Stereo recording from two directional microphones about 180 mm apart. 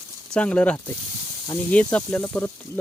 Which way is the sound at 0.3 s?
5° left (ahead or behind).